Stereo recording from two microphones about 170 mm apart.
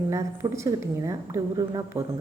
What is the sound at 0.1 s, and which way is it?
A woman's voice, 20° right (ahead or behind).